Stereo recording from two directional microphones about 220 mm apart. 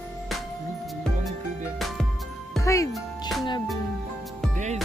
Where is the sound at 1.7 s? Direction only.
Centre (ahead or behind).